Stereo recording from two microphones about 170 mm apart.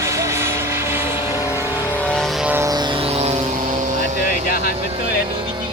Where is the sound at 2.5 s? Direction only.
20° right (ahead or behind); by 3.8 s 40° right (ahead or behind).